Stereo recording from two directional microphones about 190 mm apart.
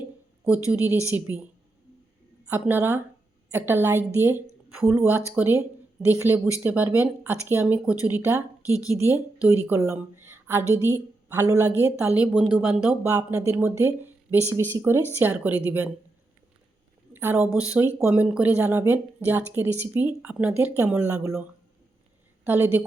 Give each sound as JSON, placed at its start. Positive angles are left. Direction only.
{"t": 0.7, "sound": "speech", "side_deg": -10}
{"t": 2.5, "sound": "a woman's voice", "side_deg": -10}
{"t": 17.1, "sound": "speech", "side_deg": -10}
{"t": 22.4, "sound": "speech", "side_deg": -10}